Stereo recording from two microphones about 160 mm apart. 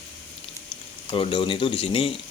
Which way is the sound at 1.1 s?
35° left (ahead or behind).